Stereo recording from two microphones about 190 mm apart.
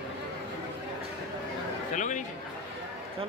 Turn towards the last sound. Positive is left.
turn(degrees=40)  # may be behind; listen again after turning